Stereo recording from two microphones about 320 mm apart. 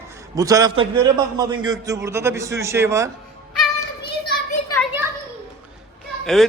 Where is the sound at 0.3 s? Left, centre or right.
Centre.